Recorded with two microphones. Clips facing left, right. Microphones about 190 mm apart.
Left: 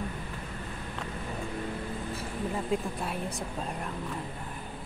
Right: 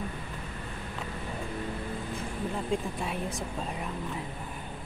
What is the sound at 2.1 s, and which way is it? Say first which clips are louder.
Speech: left 1 dB; 5° left (ahead or behind).